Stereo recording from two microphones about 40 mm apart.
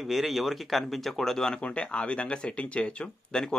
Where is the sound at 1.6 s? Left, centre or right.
Left.